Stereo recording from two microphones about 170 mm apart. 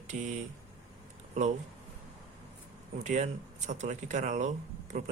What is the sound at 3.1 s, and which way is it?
Speech, 45° right (ahead or behind).